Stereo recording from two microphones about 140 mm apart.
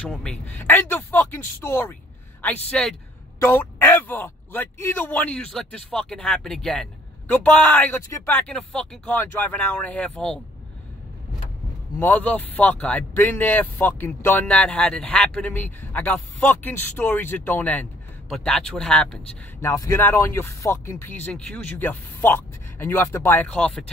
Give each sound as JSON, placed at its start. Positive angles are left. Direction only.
{"t": 0.0, "sound": "speech", "side_deg": 5}
{"t": 2.4, "sound": "speech", "side_deg": 5}
{"t": 3.3, "sound": "speech", "side_deg": 15}
{"t": 12.0, "sound": "speech", "side_deg": 10}
{"t": 19.6, "sound": "speech", "side_deg": 20}